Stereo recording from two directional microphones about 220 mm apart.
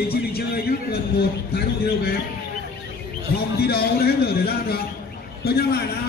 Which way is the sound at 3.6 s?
45° left (ahead or behind).